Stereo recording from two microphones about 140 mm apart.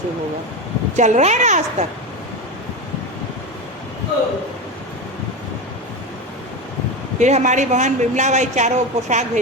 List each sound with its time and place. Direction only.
0.9 s a man's voice: 60° right (ahead or behind)
7.2 s a man's voice: 55° right (ahead or behind)